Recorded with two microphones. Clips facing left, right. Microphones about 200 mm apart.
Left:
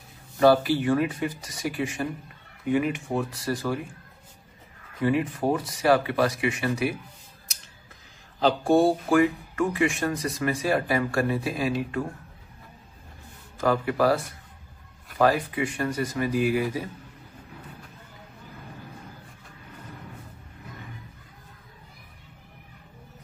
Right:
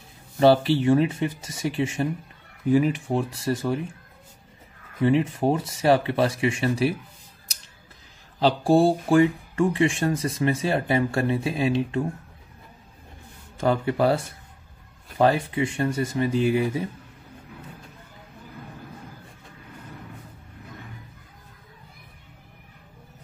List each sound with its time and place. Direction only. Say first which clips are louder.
0.4 s speech: right 1 dB; 25° right (ahead or behind)
5.0 s speech: right 3 dB; 25° right (ahead or behind)
8.4 s speech: right 2 dB; 30° right (ahead or behind)
13.6 s speech: right 1 dB; 25° right (ahead or behind)